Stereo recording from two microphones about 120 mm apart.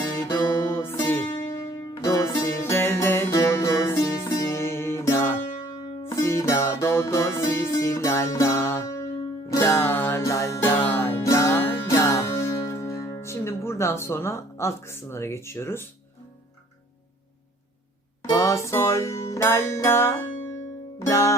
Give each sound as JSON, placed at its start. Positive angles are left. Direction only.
{"t": 0.2, "sound": "music", "side_deg": 20}
{"t": 18.3, "sound": "music", "side_deg": 25}